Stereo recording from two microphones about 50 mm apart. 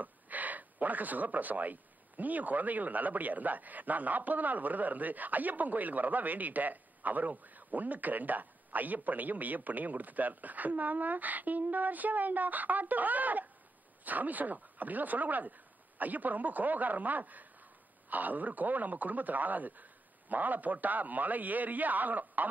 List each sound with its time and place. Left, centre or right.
0.0 s speech: right